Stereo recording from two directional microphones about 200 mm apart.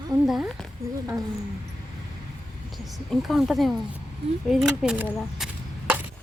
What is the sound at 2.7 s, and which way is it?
Speech, centre (ahead or behind).